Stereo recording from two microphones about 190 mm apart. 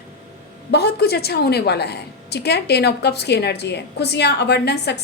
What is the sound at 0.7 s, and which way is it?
A woman's voice, 60° left (ahead or behind).